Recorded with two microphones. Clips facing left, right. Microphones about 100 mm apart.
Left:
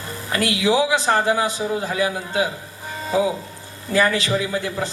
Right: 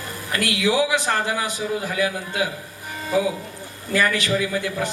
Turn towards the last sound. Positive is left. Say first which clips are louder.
# even
turn(degrees=25)  # may be behind; listen again after turning